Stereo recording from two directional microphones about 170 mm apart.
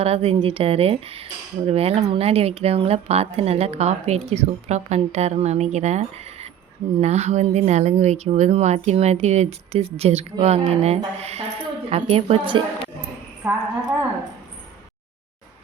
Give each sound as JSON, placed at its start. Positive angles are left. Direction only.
{"t": 0.0, "sound": "speech", "side_deg": -35}
{"t": 13.4, "sound": "a woman's voice", "side_deg": -10}